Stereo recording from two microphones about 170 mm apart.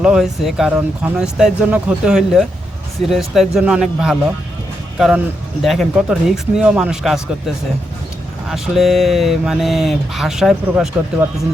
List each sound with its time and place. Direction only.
0.0 s speech: 5° right (ahead or behind)